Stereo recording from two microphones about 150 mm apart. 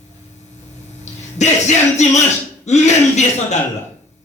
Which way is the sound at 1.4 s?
50° left (ahead or behind).